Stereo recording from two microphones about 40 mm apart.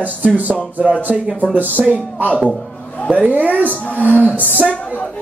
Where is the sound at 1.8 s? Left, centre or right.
Right.